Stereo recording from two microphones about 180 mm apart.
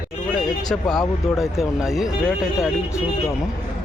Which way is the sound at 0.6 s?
Centre (ahead or behind).